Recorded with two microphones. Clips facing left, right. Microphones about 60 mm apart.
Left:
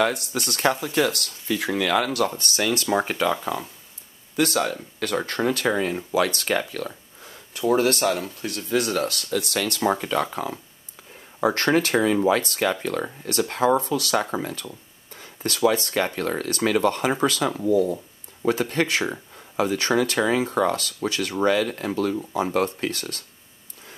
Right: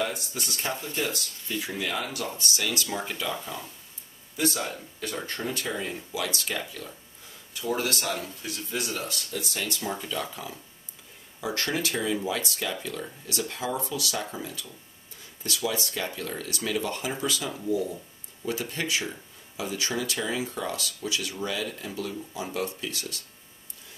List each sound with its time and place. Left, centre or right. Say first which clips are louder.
0.0 s speech: left 8 dB; left
4.4 s speech: left 6 dB; left
7.5 s speech: left 9 dB; left